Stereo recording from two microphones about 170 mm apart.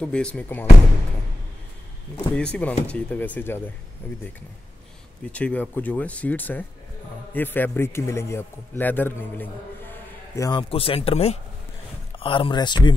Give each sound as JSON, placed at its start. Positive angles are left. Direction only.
{"t": 0.0, "sound": "a man's voice", "side_deg": 5}
{"t": 2.1, "sound": "a man's voice", "side_deg": 5}
{"t": 5.3, "sound": "a man's voice", "side_deg": 10}
{"t": 10.7, "sound": "speech", "side_deg": 35}